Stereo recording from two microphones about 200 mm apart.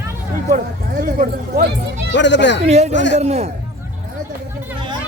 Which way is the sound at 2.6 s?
35° right (ahead or behind).